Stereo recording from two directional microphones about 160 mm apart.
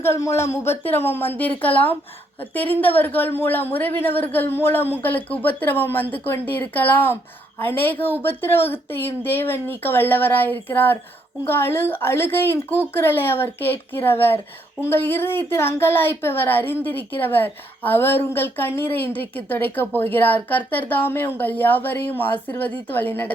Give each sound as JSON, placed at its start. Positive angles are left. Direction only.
{"t": 0.0, "sound": "a woman's voice", "side_deg": 15}